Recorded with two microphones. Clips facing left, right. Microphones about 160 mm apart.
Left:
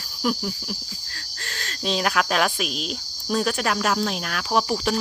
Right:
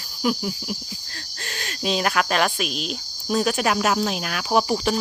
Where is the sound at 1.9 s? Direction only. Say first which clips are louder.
Right 1 dB; centre (ahead or behind).